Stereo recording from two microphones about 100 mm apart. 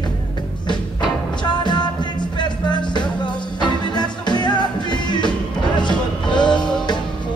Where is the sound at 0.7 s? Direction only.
50° left (ahead or behind).